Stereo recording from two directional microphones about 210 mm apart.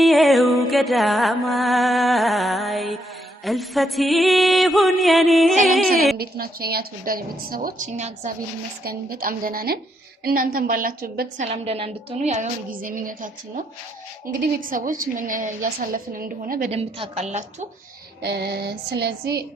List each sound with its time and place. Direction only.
0.0 s music: centre (ahead or behind)
3.4 s mantra: centre (ahead or behind)
6.1 s a woman's voice: 45° right (ahead or behind)
8.8 s a woman's voice: 45° right (ahead or behind)
18.2 s a woman's voice: 50° right (ahead or behind)